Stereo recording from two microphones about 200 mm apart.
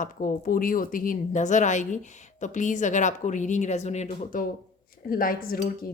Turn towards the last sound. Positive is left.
turn(degrees=45)  # may be behind; listen again after turning